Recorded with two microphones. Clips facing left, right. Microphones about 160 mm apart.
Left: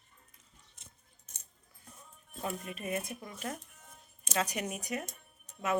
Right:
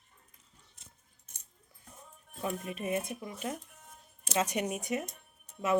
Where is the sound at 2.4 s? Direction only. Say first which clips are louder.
Right 3 dB; 20° right (ahead or behind).